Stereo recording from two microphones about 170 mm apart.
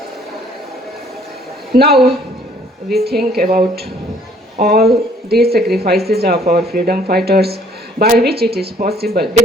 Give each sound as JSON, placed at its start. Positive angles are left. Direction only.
{"t": 1.7, "sound": "speech", "side_deg": -65}